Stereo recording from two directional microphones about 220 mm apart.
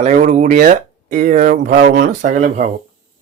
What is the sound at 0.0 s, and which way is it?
Speech, 35° right (ahead or behind).